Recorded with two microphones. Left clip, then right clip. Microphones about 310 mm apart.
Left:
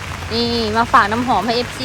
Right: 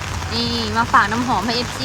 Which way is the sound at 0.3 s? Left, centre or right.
Centre.